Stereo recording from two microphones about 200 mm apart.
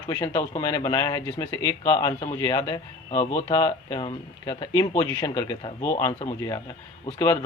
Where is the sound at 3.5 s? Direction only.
20° left (ahead or behind).